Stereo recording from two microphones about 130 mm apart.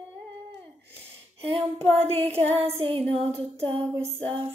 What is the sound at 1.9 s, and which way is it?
Female singing, 50° right (ahead or behind).